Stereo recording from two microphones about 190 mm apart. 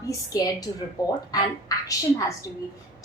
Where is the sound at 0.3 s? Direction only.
20° left (ahead or behind).